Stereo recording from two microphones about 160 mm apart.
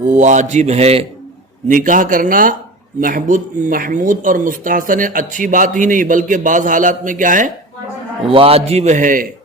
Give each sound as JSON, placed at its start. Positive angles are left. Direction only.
{"t": 0.0, "sound": "speech", "side_deg": -50}
{"t": 1.6, "sound": "speech", "side_deg": -55}
{"t": 8.3, "sound": "speech", "side_deg": -35}